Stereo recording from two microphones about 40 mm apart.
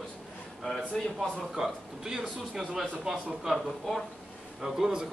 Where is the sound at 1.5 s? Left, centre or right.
Centre.